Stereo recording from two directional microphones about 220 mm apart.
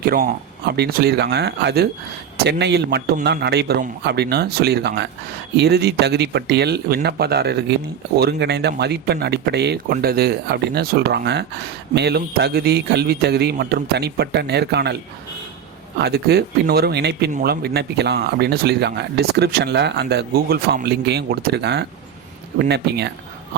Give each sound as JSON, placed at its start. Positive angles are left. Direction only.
{"t": 0.0, "sound": "speech", "side_deg": -40}
{"t": 16.0, "sound": "speech", "side_deg": -50}